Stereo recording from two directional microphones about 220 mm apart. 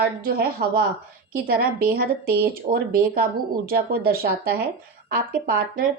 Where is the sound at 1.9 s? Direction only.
45° right (ahead or behind).